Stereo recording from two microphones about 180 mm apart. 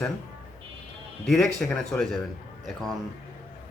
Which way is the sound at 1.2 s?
Centre (ahead or behind).